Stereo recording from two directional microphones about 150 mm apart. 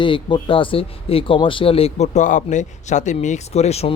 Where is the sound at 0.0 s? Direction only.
35° left (ahead or behind).